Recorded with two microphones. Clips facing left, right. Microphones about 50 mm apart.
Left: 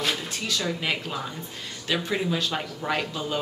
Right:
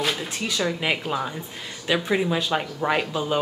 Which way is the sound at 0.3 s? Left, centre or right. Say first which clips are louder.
Right 3 dB; centre.